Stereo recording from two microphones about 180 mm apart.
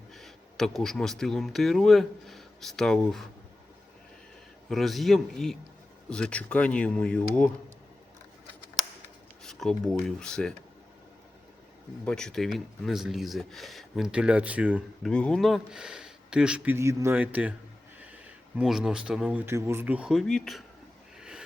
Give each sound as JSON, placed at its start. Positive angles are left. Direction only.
{"t": 0.1, "sound": "speech", "side_deg": 0}
{"t": 4.7, "sound": "speech", "side_deg": 0}
{"t": 9.4, "sound": "speech", "side_deg": 0}
{"t": 12.0, "sound": "speech", "side_deg": 5}
{"t": 15.1, "sound": "speech", "side_deg": 5}
{"t": 21.2, "sound": "a sound", "side_deg": -5}